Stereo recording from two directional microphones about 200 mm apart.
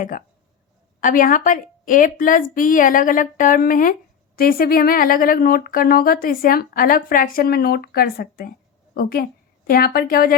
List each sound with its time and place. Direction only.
1.0 s a woman's voice: 40° left (ahead or behind)